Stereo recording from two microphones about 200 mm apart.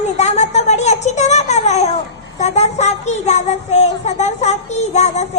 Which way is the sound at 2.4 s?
35° left (ahead or behind).